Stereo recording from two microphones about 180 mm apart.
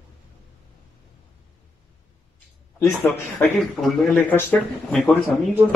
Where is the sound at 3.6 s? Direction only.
Centre (ahead or behind).